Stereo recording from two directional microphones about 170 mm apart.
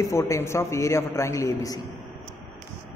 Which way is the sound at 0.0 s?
15° left (ahead or behind).